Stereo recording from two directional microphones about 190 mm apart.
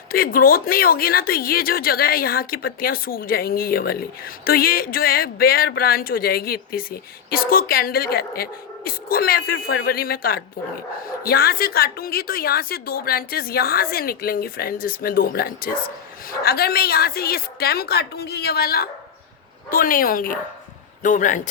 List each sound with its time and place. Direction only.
0.1 s speech: 50° left (ahead or behind)